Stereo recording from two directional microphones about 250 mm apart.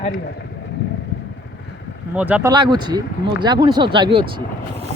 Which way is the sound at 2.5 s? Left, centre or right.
Centre.